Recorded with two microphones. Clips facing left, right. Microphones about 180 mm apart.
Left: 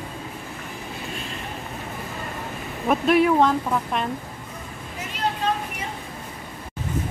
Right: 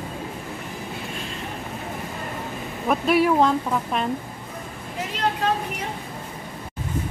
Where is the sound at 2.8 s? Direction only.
Centre (ahead or behind).